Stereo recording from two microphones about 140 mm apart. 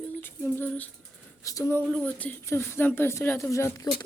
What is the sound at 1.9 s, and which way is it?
A woman's voice, 10° left (ahead or behind).